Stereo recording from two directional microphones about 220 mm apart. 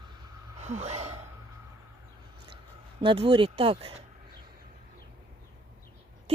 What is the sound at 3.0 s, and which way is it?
Speech, 25° right (ahead or behind).